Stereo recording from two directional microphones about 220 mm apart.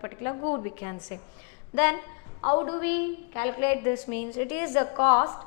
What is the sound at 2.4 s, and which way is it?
Speech, 25° left (ahead or behind).